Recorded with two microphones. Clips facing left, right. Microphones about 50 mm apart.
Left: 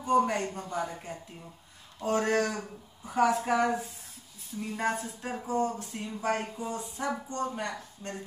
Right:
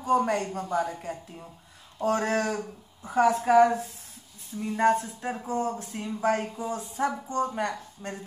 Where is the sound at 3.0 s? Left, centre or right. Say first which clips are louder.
Right 3 dB; centre.